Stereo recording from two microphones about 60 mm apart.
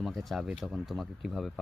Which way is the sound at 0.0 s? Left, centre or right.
Centre.